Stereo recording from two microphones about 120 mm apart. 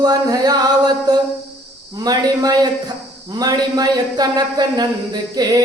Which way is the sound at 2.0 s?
35° right (ahead or behind).